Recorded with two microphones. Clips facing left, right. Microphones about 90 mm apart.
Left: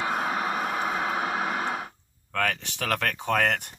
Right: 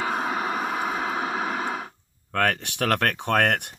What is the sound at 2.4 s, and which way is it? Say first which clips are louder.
Speech: right 5 dB; 65° right (ahead or behind).